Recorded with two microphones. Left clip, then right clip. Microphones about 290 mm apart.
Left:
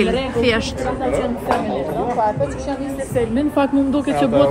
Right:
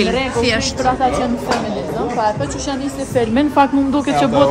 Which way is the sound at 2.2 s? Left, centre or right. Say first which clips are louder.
Right 2 dB; right.